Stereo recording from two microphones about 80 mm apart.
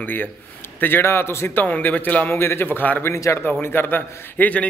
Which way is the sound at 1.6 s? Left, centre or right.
Centre.